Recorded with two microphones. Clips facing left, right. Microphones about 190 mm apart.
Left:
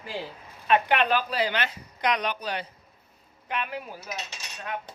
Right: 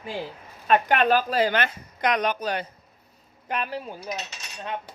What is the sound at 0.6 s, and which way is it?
Speech, 45° right (ahead or behind).